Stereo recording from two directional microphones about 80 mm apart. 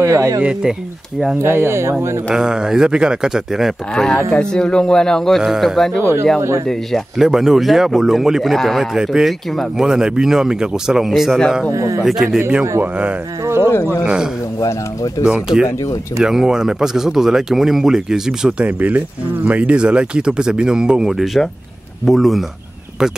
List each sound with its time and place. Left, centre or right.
0.0 s speech: right
0.4 s speech: centre
1.4 s speech: right
2.2 s speech: centre
3.9 s a man's voice: centre
5.4 s speech: centre
7.2 s speech: centre
11.7 s speech: right
12.0 s speech: centre
12.4 s a man's voice: centre
13.7 s speech: left
14.0 s speech: centre
18.8 s speech: right; by 22.4 s centre